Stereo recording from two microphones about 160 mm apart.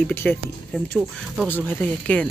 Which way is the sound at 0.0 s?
10° left (ahead or behind).